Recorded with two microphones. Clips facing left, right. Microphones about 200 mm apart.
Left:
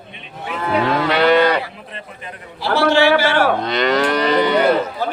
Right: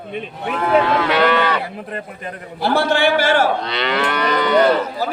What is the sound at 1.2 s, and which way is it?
Livestock, 35° left (ahead or behind).